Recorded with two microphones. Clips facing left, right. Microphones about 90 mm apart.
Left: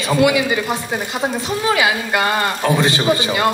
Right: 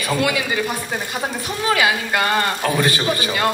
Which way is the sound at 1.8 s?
20° left (ahead or behind).